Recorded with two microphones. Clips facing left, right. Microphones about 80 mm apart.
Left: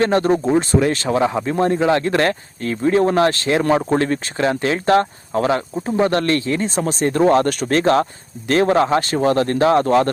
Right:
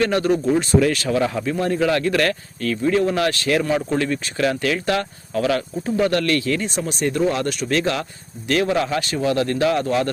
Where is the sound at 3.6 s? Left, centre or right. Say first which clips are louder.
Left 4 dB; left.